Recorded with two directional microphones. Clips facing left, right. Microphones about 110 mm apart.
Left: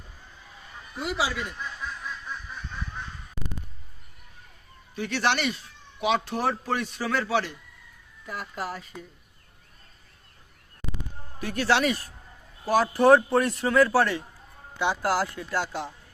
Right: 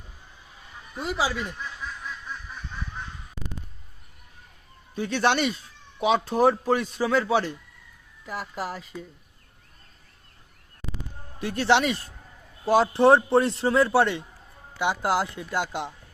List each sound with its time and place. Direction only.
1.0 s speech: 40° right (ahead or behind)
4.9 s a man's voice: 25° right (ahead or behind)
8.3 s speech: 5° right (ahead or behind)
11.3 s a man's voice: 30° right (ahead or behind)